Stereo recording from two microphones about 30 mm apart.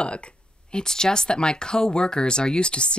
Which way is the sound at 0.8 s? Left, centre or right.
Left.